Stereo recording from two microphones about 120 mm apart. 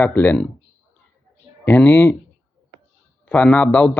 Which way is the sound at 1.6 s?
15° left (ahead or behind).